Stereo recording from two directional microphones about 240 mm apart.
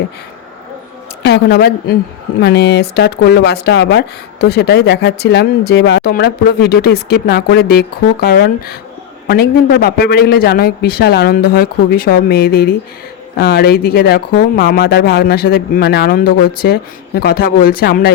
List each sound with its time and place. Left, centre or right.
1.2 s speech: left